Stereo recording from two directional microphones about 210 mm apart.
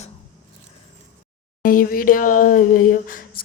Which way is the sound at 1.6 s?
45° left (ahead or behind).